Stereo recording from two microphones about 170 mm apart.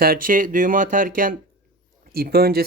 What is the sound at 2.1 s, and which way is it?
Speech, 65° right (ahead or behind).